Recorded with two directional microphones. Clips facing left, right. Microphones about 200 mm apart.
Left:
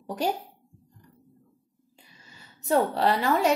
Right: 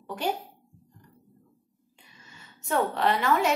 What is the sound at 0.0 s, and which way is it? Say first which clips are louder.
Speech: left 3 dB; 40° left (ahead or behind).